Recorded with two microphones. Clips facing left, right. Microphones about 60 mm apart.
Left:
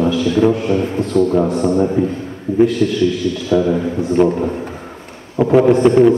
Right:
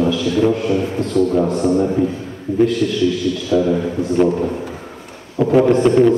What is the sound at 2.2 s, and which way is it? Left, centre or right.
A man's voice, centre.